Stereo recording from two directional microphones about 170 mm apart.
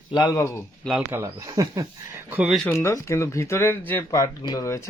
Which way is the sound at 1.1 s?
15° right (ahead or behind).